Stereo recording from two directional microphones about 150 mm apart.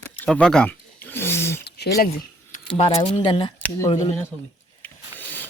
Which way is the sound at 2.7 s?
35° left (ahead or behind).